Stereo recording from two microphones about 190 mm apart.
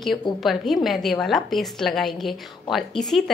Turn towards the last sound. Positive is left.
turn(degrees=0)  # may be behind; listen again after turning